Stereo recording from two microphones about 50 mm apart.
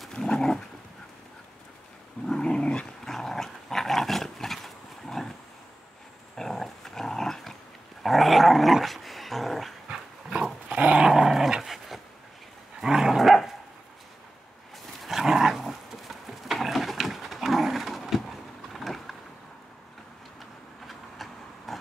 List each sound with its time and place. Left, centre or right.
0.1 s dog: centre
2.2 s dog: centre
3.1 s dog: centre
6.3 s dog: centre
10.3 s dog: right
11.1 s dog: centre
15.0 s dog: centre
20.8 s vehicle: centre